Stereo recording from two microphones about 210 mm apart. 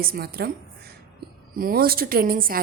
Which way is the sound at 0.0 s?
45° right (ahead or behind).